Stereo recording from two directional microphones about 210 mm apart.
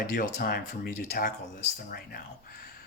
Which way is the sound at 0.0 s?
40° left (ahead or behind).